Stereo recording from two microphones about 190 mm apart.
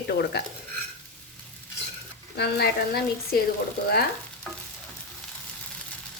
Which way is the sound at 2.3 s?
55° left (ahead or behind).